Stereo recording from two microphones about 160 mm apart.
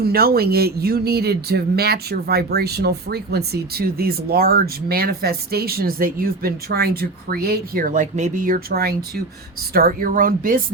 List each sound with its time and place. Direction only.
0.0 s speech: 70° right (ahead or behind)